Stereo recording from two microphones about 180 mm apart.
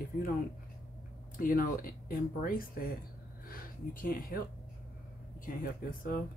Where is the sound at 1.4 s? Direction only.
50° left (ahead or behind).